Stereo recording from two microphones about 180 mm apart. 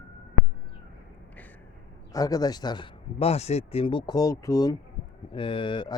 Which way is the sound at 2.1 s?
20° left (ahead or behind).